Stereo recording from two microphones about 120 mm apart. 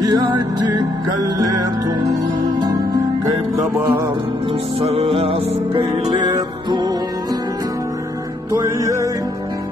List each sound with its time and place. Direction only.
0.0 s music: 35° right (ahead or behind)
4.7 s music: 55° right (ahead or behind)
5.8 s music: 30° right (ahead or behind)
8.5 s music: 25° right (ahead or behind)